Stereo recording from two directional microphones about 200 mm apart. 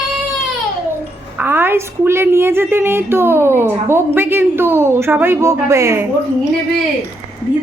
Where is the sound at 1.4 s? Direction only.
10° right (ahead or behind).